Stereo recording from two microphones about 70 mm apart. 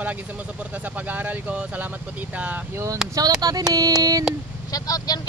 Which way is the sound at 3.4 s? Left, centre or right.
Right.